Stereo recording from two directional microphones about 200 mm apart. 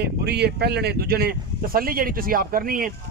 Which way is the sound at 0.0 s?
55° right (ahead or behind).